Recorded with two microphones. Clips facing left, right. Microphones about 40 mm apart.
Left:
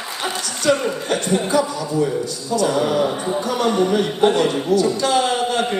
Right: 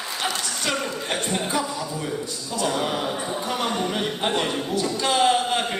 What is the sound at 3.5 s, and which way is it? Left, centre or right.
Speech, right.